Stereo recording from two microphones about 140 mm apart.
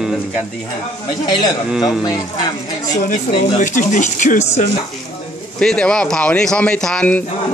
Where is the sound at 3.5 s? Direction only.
65° left (ahead or behind).